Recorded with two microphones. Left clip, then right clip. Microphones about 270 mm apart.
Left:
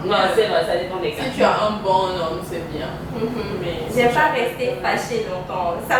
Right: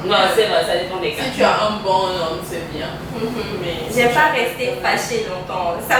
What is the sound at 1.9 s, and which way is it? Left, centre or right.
Speech, left.